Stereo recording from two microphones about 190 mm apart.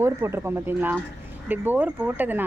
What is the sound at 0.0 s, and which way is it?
Speech, 15° right (ahead or behind).